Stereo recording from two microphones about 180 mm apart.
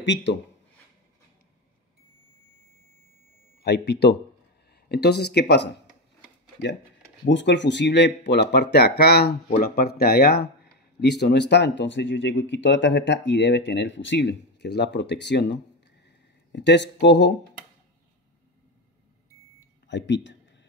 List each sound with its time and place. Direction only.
0.0 s speech: 75° left (ahead or behind)
3.6 s speech: 70° left (ahead or behind)
7.2 s speech: 80° left
19.9 s speech: 75° left (ahead or behind)